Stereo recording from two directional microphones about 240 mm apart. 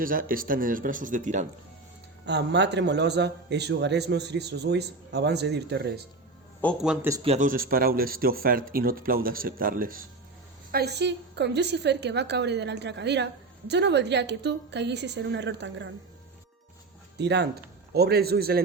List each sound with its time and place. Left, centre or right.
0.0 s speech: right
2.2 s a man's voice: right
6.6 s a man's voice: centre
7.2 s a man's voice: right
17.2 s speech: right